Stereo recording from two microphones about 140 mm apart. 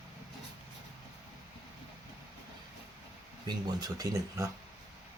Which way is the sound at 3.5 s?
30° right (ahead or behind).